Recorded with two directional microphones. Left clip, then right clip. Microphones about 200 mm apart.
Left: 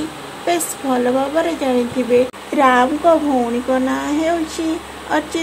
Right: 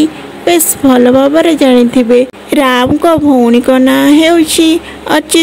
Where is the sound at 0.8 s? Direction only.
50° right (ahead or behind).